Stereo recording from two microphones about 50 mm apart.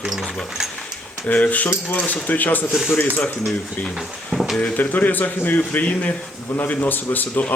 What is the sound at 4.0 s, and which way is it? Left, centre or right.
Speech, centre.